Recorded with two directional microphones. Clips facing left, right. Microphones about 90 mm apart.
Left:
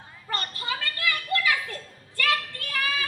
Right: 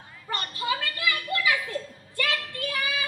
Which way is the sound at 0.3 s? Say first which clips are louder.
Right 2 dB; 20° right (ahead or behind).